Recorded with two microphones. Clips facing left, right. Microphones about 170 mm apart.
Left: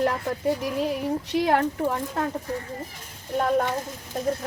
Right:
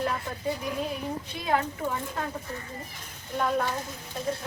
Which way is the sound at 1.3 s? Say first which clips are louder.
Left 6 dB; 75° left (ahead or behind).